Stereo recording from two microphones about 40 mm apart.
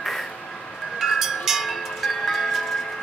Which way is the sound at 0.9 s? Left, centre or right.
Centre.